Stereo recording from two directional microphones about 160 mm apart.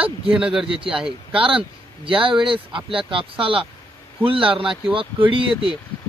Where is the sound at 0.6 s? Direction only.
35° right (ahead or behind).